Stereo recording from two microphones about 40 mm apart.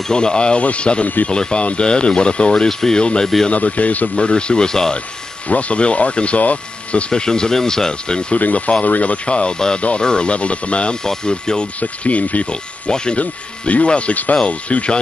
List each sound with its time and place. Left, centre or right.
0.1 s speech: left
1.0 s speech: left
1.3 s speech: left
3.5 s speech: left
4.2 s speech: left
5.5 s speech: left
7.1 s speech: centre
8.4 s speech: left
11.8 s speech: left
12.9 s speech: left
13.2 s speech: left